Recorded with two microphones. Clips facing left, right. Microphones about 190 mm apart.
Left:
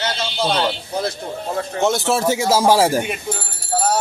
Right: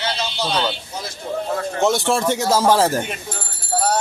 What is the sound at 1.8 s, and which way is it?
Speech, centre (ahead or behind).